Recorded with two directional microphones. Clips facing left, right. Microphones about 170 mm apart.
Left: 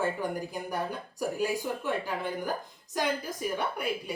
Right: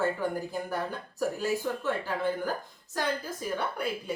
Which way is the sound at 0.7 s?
15° left (ahead or behind).